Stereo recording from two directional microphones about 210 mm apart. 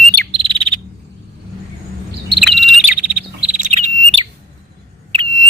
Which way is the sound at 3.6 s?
30° right (ahead or behind).